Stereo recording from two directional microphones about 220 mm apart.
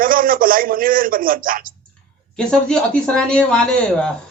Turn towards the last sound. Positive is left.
turn(degrees=5)  # may be behind; listen again after turning